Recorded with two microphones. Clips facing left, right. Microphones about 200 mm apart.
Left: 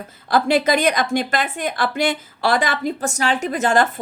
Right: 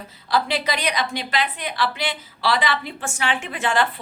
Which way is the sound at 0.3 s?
50° left (ahead or behind).